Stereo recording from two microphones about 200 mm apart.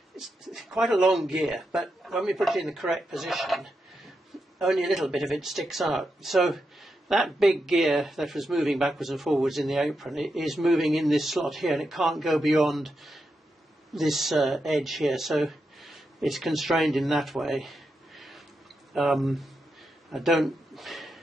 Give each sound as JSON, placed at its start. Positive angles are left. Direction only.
{"t": 0.2, "sound": "a man's voice", "side_deg": 0}